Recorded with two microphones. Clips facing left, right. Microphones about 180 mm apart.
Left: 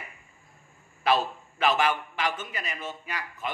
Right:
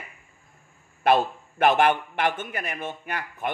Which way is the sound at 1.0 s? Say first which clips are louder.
Right 4 dB; 55° right (ahead or behind).